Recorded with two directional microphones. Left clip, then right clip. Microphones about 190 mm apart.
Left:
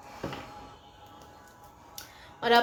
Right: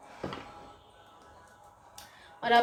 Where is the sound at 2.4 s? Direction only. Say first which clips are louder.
Left 1 dB; 55° left (ahead or behind).